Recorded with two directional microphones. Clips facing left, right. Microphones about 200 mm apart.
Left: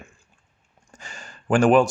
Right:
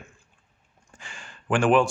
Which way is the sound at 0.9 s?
40° left (ahead or behind).